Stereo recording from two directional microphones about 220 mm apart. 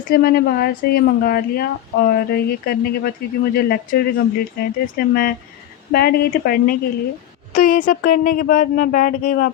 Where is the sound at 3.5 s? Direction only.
45° left (ahead or behind).